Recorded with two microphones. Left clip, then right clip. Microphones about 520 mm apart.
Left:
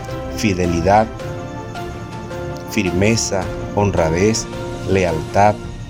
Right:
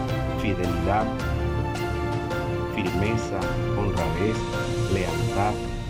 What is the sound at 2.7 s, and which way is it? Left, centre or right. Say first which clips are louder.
Speech: left 12 dB; left.